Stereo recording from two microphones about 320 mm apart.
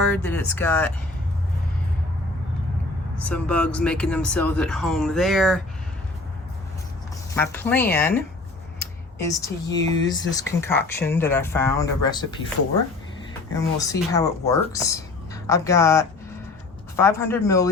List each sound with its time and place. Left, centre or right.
0.1 s speech: centre
3.2 s speech: centre
7.3 s speech: centre
10.0 s speech: left
10.3 s speech: centre
13.5 s speech: centre